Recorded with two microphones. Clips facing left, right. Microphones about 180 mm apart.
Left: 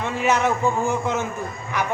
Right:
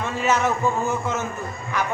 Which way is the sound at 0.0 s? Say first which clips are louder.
Left 1 dB; 15° left (ahead or behind).